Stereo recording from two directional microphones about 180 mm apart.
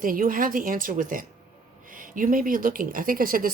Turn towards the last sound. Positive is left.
turn(degrees=-50)  # may be behind; listen again after turning